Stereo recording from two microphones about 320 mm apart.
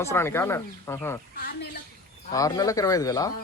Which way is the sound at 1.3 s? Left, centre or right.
Left.